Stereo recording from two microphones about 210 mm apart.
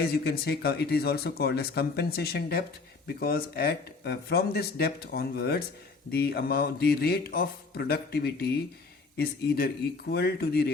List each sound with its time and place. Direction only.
0.0 s speech: 50° left (ahead or behind)